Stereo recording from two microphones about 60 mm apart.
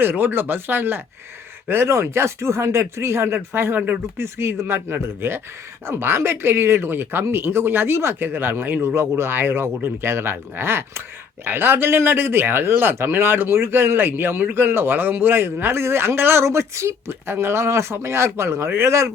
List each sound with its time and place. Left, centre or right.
0.0 s speech: right
3.8 s speech: right
4.2 s speech: right